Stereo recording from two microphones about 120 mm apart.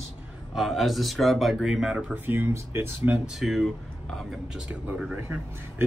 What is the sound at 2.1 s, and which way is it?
Speech, 15° right (ahead or behind).